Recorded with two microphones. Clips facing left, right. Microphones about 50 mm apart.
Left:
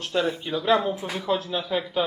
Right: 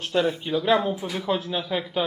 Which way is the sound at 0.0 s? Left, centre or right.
Centre.